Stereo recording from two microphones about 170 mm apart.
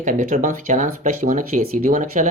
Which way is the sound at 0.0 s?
50° right (ahead or behind).